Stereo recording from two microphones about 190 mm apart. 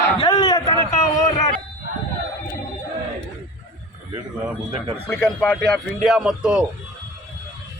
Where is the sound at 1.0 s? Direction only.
35° left (ahead or behind).